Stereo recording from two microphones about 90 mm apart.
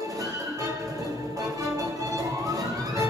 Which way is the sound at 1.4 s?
40° right (ahead or behind).